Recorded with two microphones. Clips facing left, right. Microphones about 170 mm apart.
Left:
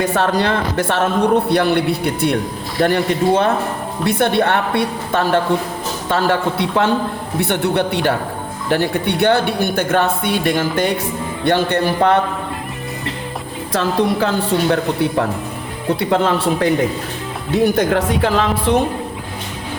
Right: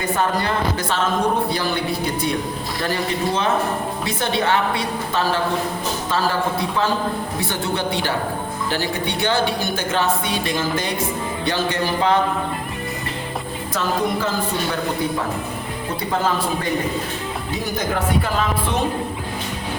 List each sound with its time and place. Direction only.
0.0 s speech: 85° left; by 1.8 s 65° left (ahead or behind)
2.8 s speech: 60° left (ahead or behind)
13.7 s speech: 75° left (ahead or behind)
16.0 s speech: 75° left (ahead or behind); by 18.8 s 90° left